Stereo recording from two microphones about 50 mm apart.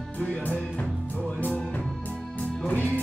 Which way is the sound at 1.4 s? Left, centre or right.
Left.